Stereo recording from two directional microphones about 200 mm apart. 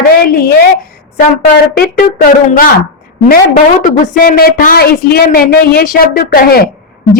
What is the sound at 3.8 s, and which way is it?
Speech, 45° left (ahead or behind).